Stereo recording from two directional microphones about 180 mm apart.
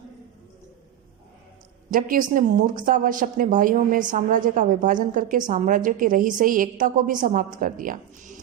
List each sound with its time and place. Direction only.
1.9 s a woman's voice: 50° right (ahead or behind)